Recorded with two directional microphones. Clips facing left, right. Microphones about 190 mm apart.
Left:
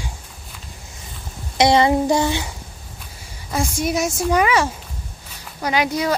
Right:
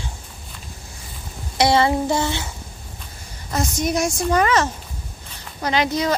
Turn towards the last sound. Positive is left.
turn(degrees=10)  # may be behind; listen again after turning